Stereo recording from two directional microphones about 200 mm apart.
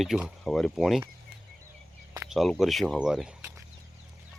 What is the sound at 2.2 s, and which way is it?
Speech, centre (ahead or behind).